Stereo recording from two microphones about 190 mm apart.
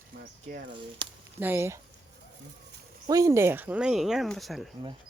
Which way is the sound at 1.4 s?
10° right (ahead or behind).